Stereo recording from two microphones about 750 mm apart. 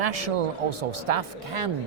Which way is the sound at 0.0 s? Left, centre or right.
Right.